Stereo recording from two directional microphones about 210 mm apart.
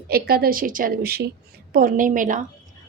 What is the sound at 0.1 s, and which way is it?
A woman's voice, 45° right (ahead or behind).